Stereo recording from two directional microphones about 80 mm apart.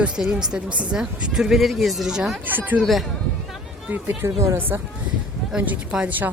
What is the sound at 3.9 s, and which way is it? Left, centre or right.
Speech, right.